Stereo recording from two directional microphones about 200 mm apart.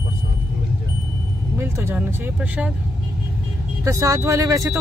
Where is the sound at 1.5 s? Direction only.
15° right (ahead or behind).